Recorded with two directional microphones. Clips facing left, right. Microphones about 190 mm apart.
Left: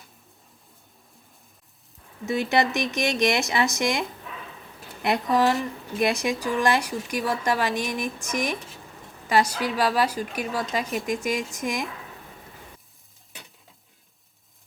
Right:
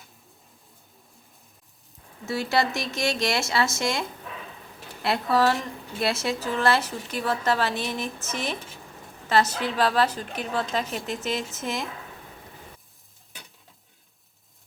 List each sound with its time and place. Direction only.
2.2 s a woman's voice: 20° left (ahead or behind)
5.0 s a woman's voice: 15° left (ahead or behind)
8.5 s a woman's voice: centre (ahead or behind)
9.3 s a woman's voice: 10° left (ahead or behind)
13.3 s stir: centre (ahead or behind)